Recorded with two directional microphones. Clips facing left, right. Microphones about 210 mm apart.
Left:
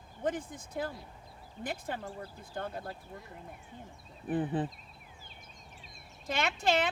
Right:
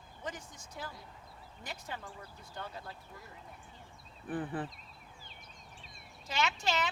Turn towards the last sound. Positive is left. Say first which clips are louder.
# left 4 dB
turn(degrees=55)  # may be behind; listen again after turning